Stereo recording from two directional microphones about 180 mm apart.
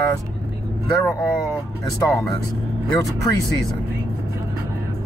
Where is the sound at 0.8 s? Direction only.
15° left (ahead or behind).